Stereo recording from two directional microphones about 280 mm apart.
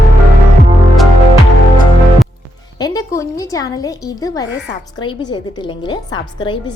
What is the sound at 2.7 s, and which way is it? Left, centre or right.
A woman's voice, centre.